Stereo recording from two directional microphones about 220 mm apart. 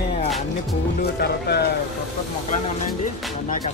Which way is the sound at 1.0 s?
45° left (ahead or behind).